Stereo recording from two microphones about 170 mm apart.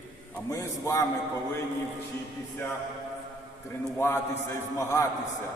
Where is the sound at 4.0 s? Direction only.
15° left (ahead or behind).